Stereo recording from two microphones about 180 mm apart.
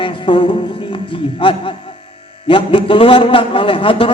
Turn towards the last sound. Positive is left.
turn(degrees=30)  # may be behind; listen again after turning